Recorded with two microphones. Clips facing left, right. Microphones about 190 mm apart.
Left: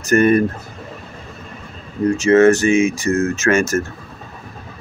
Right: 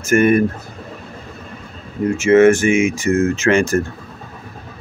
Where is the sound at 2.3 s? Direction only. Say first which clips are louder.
Right 1 dB; 10° right (ahead or behind).